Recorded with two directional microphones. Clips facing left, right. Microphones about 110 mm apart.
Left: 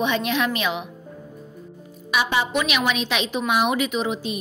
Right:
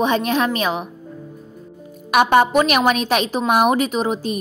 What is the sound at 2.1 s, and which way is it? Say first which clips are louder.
A woman's voice: right 8 dB; 50° right (ahead or behind).